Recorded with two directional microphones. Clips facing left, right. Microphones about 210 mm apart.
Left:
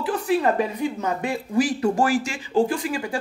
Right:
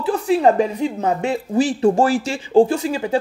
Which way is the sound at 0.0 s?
30° right (ahead or behind).